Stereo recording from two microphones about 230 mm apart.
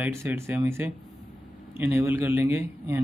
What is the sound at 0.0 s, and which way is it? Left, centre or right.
Speech, centre.